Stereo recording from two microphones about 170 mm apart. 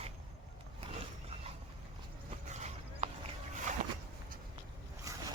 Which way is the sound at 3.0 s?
40° right (ahead or behind).